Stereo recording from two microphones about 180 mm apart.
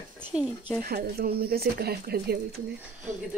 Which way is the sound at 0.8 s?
55° right (ahead or behind).